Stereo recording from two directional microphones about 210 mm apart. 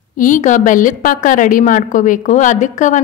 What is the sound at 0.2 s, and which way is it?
A woman's voice, 40° left (ahead or behind).